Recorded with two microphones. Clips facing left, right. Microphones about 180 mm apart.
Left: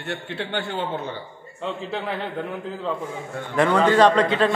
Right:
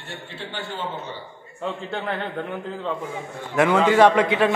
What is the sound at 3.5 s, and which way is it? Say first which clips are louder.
Speech: right 1 dB; 10° right (ahead or behind).